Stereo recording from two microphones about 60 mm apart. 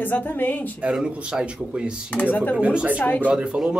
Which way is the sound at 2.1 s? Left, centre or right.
Left.